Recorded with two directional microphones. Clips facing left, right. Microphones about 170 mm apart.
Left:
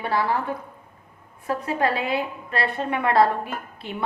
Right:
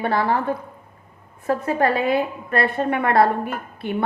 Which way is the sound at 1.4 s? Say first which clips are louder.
Right 4 dB; 50° right (ahead or behind).